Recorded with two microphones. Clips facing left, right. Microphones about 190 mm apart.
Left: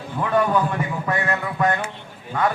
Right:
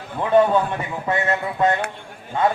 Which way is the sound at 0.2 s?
25° right (ahead or behind).